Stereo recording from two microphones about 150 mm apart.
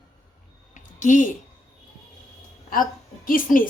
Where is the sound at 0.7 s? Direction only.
60° left (ahead or behind).